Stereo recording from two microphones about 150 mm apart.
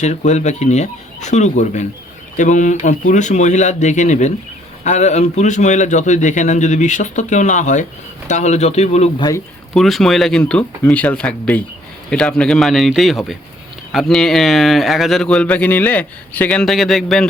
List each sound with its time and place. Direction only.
0.0 s a man's voice: 50° left (ahead or behind)
9.1 s speech: 25° left (ahead or behind)
9.7 s a man's voice: centre (ahead or behind)